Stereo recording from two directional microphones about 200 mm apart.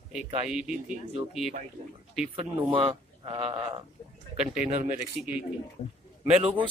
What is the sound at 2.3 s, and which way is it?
Speech, 25° right (ahead or behind).